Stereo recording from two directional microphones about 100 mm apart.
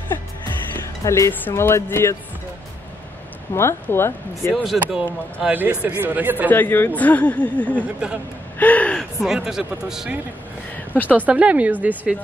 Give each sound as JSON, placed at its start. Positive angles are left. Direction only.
{"t": 1.0, "sound": "speech", "side_deg": 30}
{"t": 3.5, "sound": "speech", "side_deg": 25}
{"t": 4.6, "sound": "speech", "side_deg": -5}
{"t": 5.5, "sound": "speech", "side_deg": -15}
{"t": 6.5, "sound": "speech", "side_deg": 20}
{"t": 7.0, "sound": "a sound", "side_deg": 15}
{"t": 8.0, "sound": "speech", "side_deg": -10}
{"t": 8.5, "sound": "gasp", "side_deg": 15}
{"t": 9.2, "sound": "speech", "side_deg": -5}
{"t": 10.9, "sound": "speech", "side_deg": 15}
{"t": 11.1, "sound": "speech", "side_deg": -15}